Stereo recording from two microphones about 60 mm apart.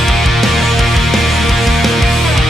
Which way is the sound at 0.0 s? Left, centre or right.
Centre.